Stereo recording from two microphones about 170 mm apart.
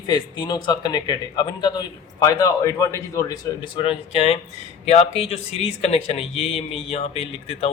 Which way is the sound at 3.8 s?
35° left (ahead or behind).